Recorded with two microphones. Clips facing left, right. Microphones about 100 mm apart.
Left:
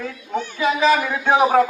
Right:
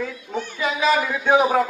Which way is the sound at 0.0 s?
Centre (ahead or behind).